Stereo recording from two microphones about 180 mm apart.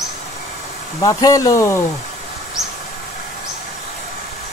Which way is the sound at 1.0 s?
20° left (ahead or behind).